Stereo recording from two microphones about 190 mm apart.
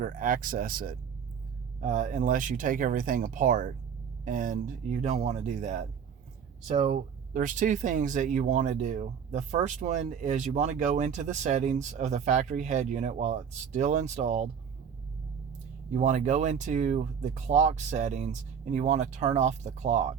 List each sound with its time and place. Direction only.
0.0 s speech: 45° right (ahead or behind)
15.9 s speech: 40° right (ahead or behind)